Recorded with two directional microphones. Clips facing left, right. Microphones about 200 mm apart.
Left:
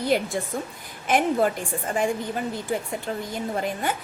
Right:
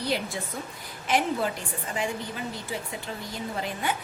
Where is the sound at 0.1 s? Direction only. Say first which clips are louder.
Left 6 dB; 50° left (ahead or behind).